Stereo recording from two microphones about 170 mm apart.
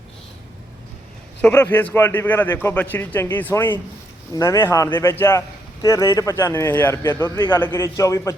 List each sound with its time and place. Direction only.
1.4 s a man's voice: 10° left (ahead or behind)